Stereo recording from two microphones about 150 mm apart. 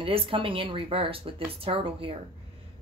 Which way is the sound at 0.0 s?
40° right (ahead or behind).